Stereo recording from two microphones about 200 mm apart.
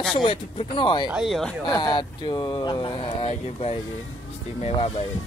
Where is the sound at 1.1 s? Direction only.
Centre (ahead or behind).